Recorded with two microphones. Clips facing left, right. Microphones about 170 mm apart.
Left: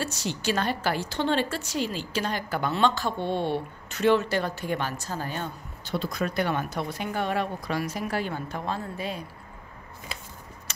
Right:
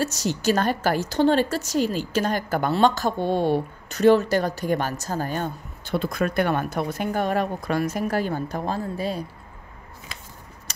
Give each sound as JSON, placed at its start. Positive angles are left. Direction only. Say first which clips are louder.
{"t": 0.0, "sound": "a woman's voice", "louder": "right 6 dB", "side_deg": -40}